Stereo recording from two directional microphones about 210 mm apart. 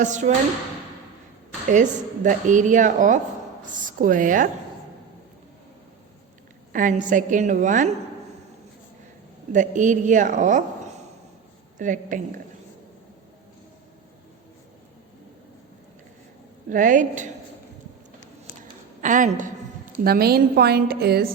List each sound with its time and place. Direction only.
0.0 s speech: 35° right (ahead or behind)
2.2 s speech: 40° right (ahead or behind)
6.7 s speech: 40° right (ahead or behind)
9.5 s speech: 35° right (ahead or behind)
16.6 s speech: 40° right (ahead or behind)
19.0 s a sound: 40° right (ahead or behind)
20.1 s a woman's voice: 45° right (ahead or behind)